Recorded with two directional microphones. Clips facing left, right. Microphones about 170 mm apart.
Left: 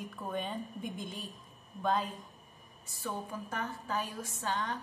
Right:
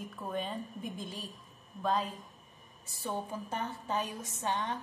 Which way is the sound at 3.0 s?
25° right (ahead or behind).